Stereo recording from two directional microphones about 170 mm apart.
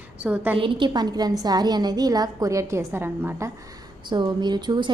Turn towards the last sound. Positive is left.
turn(degrees=-25)  # may be behind; listen again after turning